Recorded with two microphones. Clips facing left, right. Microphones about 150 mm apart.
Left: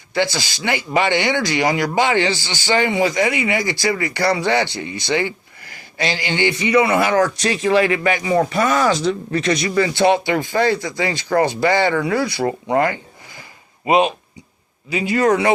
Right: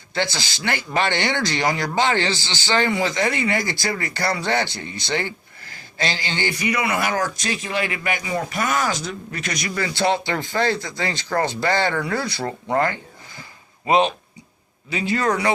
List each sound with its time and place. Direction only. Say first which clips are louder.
0.1 s speech: left 5 dB; 15° left (ahead or behind)